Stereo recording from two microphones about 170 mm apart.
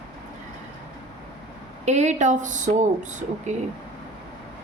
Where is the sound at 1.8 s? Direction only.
40° right (ahead or behind).